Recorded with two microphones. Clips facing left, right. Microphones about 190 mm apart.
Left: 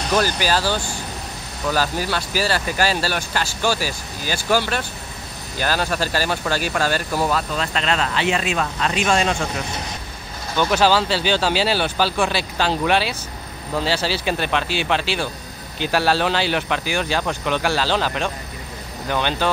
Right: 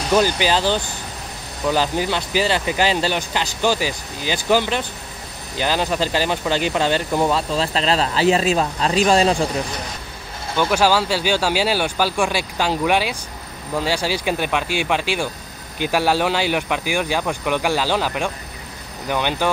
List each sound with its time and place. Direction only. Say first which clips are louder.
0.1 s speech: right 3 dB; 20° right (ahead or behind); by 9.5 s 35° right (ahead or behind)
10.6 s speech: even; 10° right (ahead or behind)